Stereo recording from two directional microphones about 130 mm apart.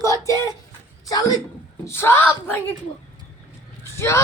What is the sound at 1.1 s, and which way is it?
A man's voice, 30° left (ahead or behind).